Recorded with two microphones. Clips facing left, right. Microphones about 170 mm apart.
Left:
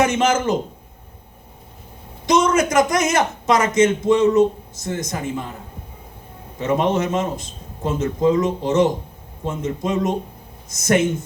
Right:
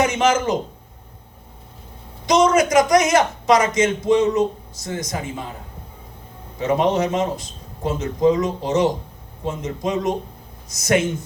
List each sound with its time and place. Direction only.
0.0 s a man's voice: 50° left (ahead or behind)
2.2 s speech: 50° left (ahead or behind)
6.6 s speech: 50° left (ahead or behind)